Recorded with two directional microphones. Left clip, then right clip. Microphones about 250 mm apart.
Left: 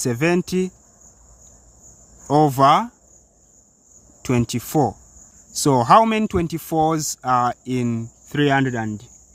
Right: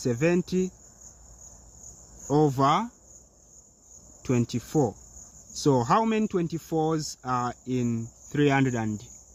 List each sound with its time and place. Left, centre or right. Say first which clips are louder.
0.0 s speech: left 5 dB; left
2.2 s speech: left 8 dB; left
4.2 s speech: left 6 dB; left